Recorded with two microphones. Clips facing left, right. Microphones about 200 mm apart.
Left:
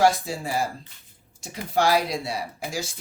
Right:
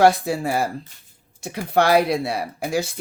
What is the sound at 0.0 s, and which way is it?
Speech, 60° right (ahead or behind).